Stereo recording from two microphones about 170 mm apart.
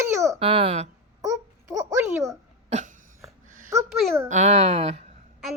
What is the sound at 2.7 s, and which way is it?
Cough, 45° right (ahead or behind).